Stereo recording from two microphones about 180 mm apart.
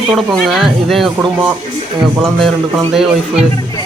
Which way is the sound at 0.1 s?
Centre (ahead or behind).